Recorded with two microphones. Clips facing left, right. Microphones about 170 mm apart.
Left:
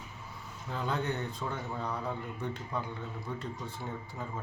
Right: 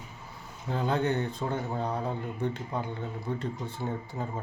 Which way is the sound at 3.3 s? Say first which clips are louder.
Right 6 dB; 25° right (ahead or behind).